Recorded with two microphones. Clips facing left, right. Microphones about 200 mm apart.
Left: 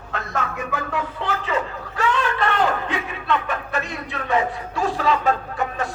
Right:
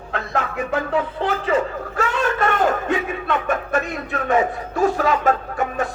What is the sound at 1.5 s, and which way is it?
A man's voice, 50° right (ahead or behind).